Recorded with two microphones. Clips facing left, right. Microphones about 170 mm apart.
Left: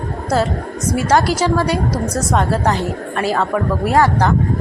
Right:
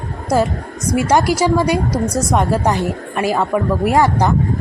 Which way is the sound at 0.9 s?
15° right (ahead or behind).